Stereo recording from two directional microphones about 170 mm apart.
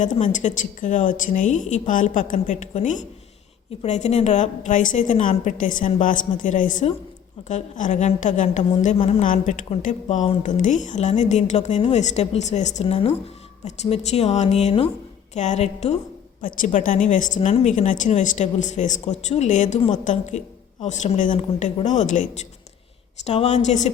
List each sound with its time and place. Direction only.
0.0 s speech: 45° left (ahead or behind)
9.2 s a woman's voice: 50° left (ahead or behind)
16.4 s speech: 55° left (ahead or behind)